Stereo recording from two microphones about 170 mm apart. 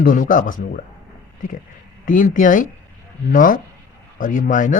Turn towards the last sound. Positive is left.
turn(degrees=50)  # may be behind; listen again after turning